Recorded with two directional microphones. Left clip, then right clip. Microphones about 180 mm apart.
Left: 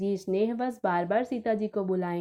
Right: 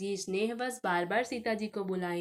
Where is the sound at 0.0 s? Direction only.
45° left (ahead or behind).